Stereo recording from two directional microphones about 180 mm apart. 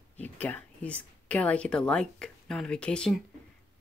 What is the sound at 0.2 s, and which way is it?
Speech, 10° left (ahead or behind).